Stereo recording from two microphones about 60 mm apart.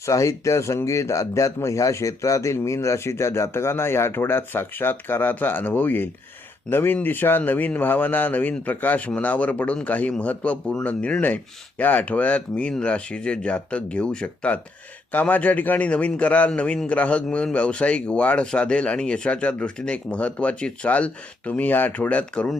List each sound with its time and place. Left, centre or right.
0.0 s speech: left